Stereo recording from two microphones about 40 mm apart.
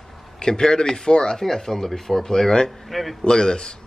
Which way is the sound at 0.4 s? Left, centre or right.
Centre.